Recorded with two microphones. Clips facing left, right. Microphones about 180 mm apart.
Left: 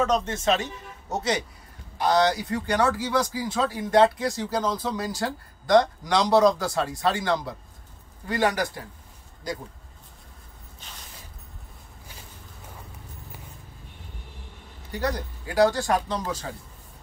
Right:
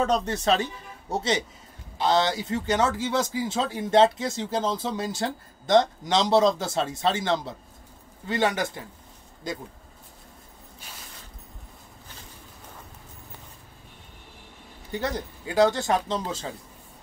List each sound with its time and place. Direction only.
0.0 s speech: 35° right (ahead or behind)
14.9 s speech: 25° right (ahead or behind)